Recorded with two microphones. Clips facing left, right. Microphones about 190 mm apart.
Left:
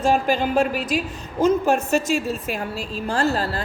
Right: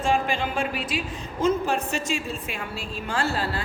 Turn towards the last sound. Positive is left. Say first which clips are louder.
# left 5 dB
turn(degrees=40)  # may be behind; listen again after turning